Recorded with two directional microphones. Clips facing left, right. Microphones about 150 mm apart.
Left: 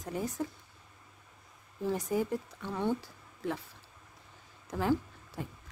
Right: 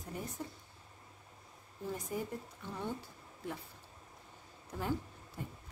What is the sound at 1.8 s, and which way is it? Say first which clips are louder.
Speech: left 8 dB; 90° left.